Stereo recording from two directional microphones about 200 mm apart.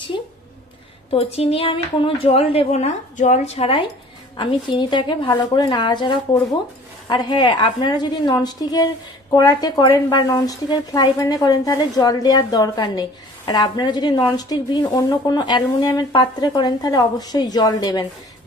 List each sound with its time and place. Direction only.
1.1 s speech: 30° left (ahead or behind)